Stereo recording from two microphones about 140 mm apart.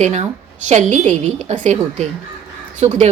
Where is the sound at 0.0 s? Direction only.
55° right (ahead or behind).